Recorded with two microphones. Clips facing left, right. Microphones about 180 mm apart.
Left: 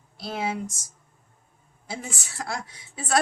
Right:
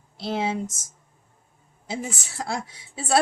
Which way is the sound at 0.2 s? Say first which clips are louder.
Right 3 dB; 25° right (ahead or behind).